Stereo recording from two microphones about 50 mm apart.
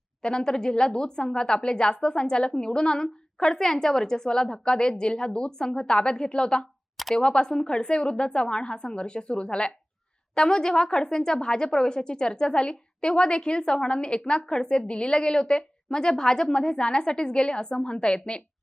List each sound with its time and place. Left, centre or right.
0.2 s a woman's voice: centre
6.9 s a sound: centre
7.2 s a woman's voice: centre